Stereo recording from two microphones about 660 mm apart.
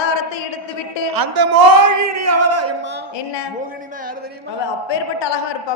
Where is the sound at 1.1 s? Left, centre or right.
Right.